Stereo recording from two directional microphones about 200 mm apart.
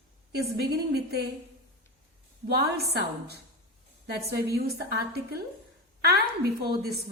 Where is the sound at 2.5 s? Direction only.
50° right (ahead or behind).